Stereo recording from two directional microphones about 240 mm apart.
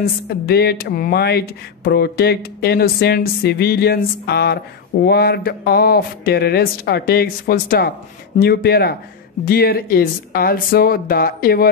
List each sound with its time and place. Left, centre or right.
0.0 s speech: left